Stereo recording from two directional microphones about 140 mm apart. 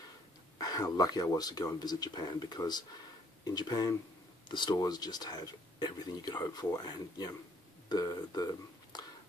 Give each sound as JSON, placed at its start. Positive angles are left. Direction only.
{"t": 0.6, "sound": "speech", "side_deg": 25}